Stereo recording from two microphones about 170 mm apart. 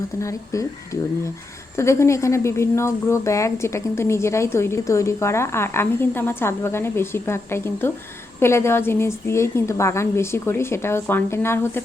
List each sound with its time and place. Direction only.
0.2 s speech: 20° left (ahead or behind)
1.7 s speech: 15° left (ahead or behind)